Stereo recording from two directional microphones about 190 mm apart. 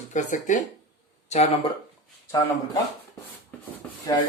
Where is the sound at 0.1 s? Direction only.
40° left (ahead or behind).